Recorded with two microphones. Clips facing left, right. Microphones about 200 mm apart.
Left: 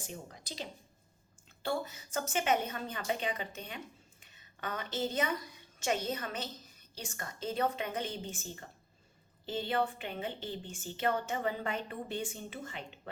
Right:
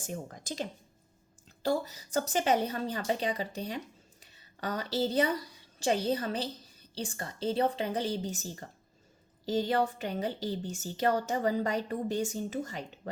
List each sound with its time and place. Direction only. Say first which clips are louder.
0.0 s speech: right 6 dB; 45° right (ahead or behind)
1.6 s a woman's voice: right 5 dB; 35° right (ahead or behind)